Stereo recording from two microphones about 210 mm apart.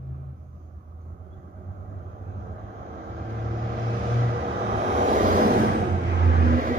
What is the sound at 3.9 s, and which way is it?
Vehicle, 35° right (ahead or behind).